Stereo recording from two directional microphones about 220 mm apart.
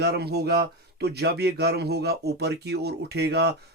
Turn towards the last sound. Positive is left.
turn(degrees=-50)  # may be behind; listen again after turning